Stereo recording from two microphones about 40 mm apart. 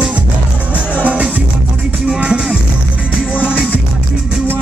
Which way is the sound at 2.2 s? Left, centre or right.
Right.